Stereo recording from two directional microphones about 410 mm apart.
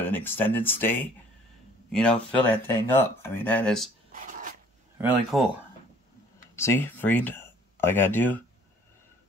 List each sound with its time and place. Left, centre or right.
0.0 s speech: centre
4.1 s a sound: centre
5.0 s speech: centre
6.5 s speech: centre